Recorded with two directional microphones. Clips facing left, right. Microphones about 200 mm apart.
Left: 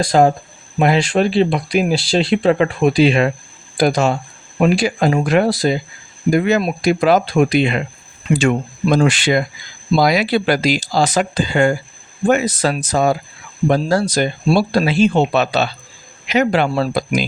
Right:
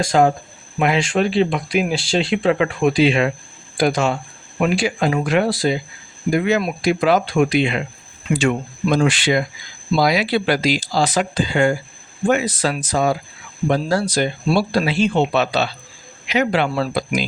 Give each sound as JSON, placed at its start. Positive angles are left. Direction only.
{"t": 0.0, "sound": "speech", "side_deg": 35}